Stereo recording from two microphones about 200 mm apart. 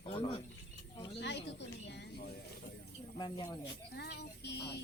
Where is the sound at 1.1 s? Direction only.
60° left (ahead or behind).